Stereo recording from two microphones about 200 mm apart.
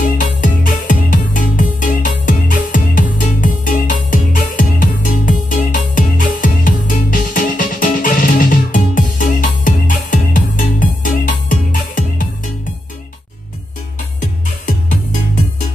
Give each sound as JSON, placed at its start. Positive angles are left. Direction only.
{"t": 0.0, "sound": "music", "side_deg": 45}
{"t": 14.2, "sound": "music", "side_deg": 40}